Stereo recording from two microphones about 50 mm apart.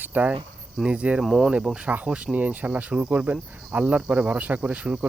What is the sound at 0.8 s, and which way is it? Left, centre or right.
Speech, right.